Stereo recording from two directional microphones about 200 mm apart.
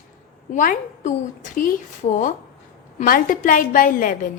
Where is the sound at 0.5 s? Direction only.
40° left (ahead or behind).